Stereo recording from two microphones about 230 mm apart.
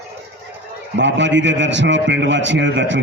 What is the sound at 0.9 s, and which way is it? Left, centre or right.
A man's voice, right.